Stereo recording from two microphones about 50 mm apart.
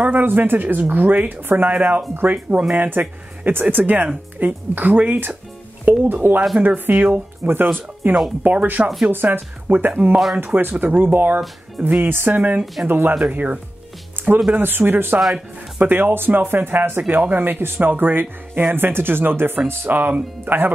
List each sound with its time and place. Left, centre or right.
0.0 s speech: right
5.9 s speech: right
7.4 s speech: right
8.5 s speech: right
9.1 s speech: right
12.4 s speech: right
12.8 s speech: right
14.2 s music: right
14.5 s speech: right
15.1 s speech: centre
15.8 s speech: right